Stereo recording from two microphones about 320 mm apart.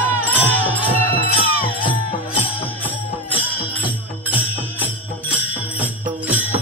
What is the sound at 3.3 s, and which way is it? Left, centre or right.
Music, centre.